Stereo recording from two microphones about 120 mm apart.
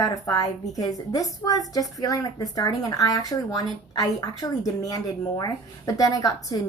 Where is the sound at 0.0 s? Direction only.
30° left (ahead or behind).